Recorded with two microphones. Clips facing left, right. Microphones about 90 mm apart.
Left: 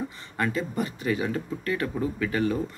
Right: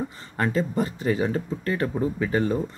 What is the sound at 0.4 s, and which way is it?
Speech, 35° right (ahead or behind).